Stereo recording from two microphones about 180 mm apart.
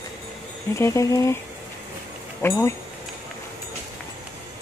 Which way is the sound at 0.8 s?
15° left (ahead or behind).